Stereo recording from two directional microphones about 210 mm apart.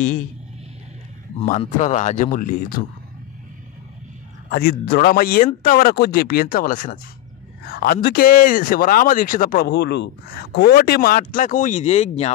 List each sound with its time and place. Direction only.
1.4 s speech: 30° left (ahead or behind)
4.5 s speech: 45° left (ahead or behind); by 12.3 s 30° left (ahead or behind)